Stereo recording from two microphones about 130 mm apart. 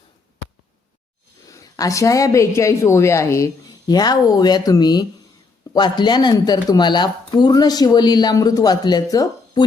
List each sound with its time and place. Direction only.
1.5 s speech: 25° left (ahead or behind)